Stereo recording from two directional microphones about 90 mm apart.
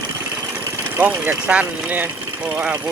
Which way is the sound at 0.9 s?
20° right (ahead or behind).